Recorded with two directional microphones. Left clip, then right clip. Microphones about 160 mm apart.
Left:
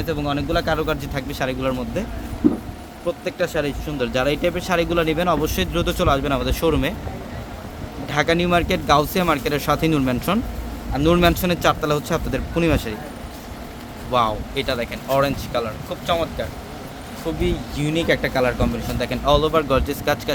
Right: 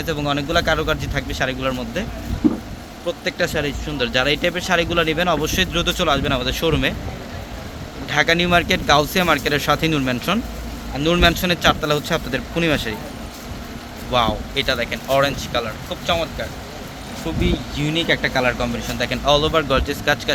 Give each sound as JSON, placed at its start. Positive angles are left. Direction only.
{"t": 0.0, "sound": "speech", "side_deg": -5}
{"t": 3.1, "sound": "speech", "side_deg": 10}
{"t": 8.1, "sound": "speech", "side_deg": 5}
{"t": 10.9, "sound": "speech", "side_deg": 25}
{"t": 11.2, "sound": "speech", "side_deg": 10}
{"t": 14.1, "sound": "speech", "side_deg": 5}
{"t": 16.0, "sound": "speech", "side_deg": 20}